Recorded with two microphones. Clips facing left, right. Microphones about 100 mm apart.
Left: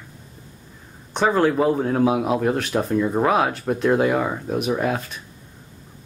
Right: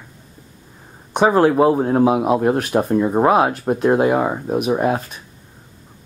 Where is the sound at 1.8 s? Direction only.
30° right (ahead or behind).